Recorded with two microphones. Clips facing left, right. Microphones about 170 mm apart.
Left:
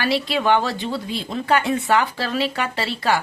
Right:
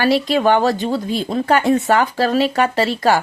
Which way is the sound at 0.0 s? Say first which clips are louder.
Right 6 dB; 45° right (ahead or behind).